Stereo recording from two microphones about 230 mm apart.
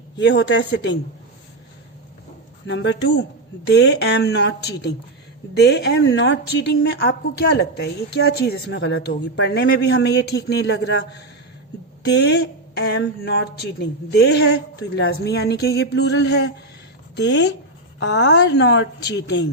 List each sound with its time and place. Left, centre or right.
0.2 s a woman's voice: left
2.6 s a woman's voice: left